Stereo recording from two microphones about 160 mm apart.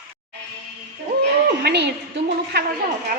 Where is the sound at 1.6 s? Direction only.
90° right.